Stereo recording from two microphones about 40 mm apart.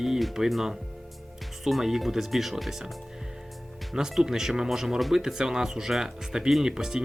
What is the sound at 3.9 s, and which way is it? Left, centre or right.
Speech, centre.